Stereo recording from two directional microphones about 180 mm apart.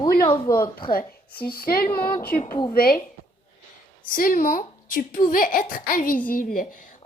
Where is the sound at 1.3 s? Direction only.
55° left (ahead or behind).